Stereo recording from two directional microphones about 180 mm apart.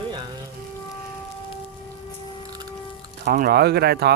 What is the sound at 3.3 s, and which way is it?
Speech, 55° right (ahead or behind).